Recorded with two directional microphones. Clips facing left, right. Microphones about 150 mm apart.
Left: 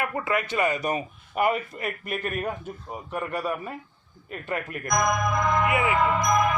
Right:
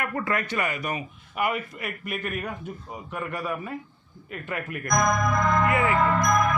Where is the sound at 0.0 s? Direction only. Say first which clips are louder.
Left 1 dB; 20° left (ahead or behind).